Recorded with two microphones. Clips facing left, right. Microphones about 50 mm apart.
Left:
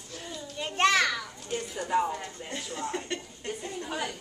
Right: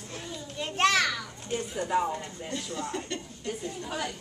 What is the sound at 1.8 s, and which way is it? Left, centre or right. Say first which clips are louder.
Speech: even; right.